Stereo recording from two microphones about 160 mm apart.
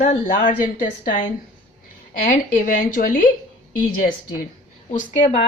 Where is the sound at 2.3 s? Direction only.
55° left (ahead or behind).